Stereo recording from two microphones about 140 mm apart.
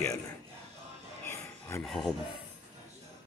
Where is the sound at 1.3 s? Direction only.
20° left (ahead or behind).